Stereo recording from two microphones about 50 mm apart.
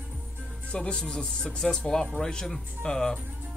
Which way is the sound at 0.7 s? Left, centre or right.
Left.